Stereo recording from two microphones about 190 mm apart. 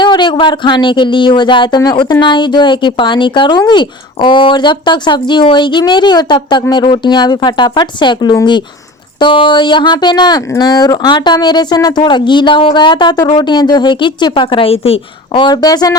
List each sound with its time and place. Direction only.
0.0 s speech: 25° left (ahead or behind)